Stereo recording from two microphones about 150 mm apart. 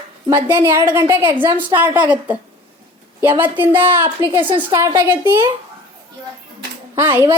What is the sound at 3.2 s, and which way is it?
A woman's voice, 15° right (ahead or behind).